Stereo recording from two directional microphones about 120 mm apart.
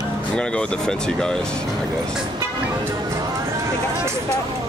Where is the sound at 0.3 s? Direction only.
10° left (ahead or behind).